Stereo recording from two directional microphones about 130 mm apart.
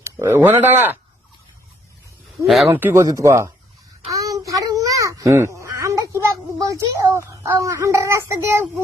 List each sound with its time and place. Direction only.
0.0 s speech: 20° right (ahead or behind)
2.7 s speech: 20° right (ahead or behind)
4.1 s a sound: 25° right (ahead or behind)